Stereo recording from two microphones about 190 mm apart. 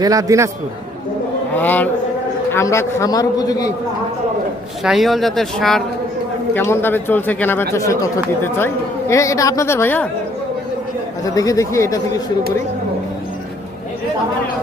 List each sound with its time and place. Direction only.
0.0 s a man's voice: 20° right (ahead or behind)
1.5 s a man's voice: 10° left (ahead or behind)
4.8 s speech: centre (ahead or behind)
6.5 s speech: 10° left (ahead or behind)
11.3 s speech: 15° left (ahead or behind)